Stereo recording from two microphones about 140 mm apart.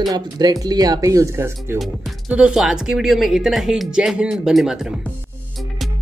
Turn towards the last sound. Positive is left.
turn(degrees=-5)  # may be behind; listen again after turning